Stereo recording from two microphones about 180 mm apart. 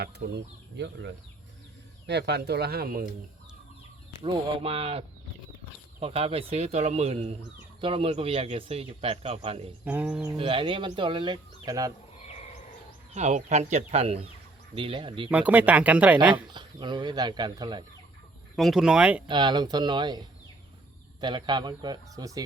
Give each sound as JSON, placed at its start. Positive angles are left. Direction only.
{"t": 0.0, "sound": "speech", "side_deg": -70}
{"t": 4.2, "sound": "speech", "side_deg": -30}
{"t": 9.8, "sound": "speech", "side_deg": -10}
{"t": 10.3, "sound": "speech", "side_deg": -30}
{"t": 13.1, "sound": "speech", "side_deg": -40}
{"t": 15.3, "sound": "speech", "side_deg": -10}
{"t": 16.5, "sound": "speech", "side_deg": -25}
{"t": 18.5, "sound": "speech", "side_deg": 0}
{"t": 19.3, "sound": "speech", "side_deg": -25}